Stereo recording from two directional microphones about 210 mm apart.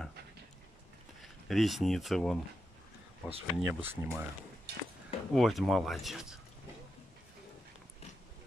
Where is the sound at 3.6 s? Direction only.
10° right (ahead or behind).